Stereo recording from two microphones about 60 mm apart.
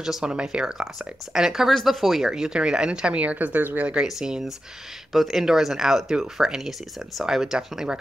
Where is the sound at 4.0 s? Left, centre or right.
Centre.